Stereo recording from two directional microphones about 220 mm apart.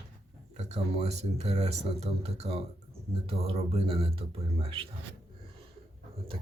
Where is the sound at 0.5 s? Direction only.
30° right (ahead or behind).